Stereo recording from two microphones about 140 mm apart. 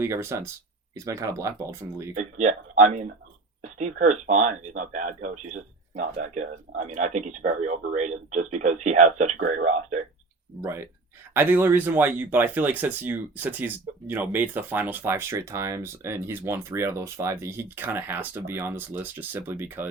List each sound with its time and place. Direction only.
0.0 s speech: 15° right (ahead or behind)
2.1 s speech: 60° right (ahead or behind)
10.6 s speech: 20° right (ahead or behind)